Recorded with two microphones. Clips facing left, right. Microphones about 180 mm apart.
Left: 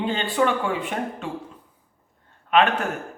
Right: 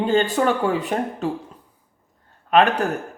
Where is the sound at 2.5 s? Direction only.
40° right (ahead or behind).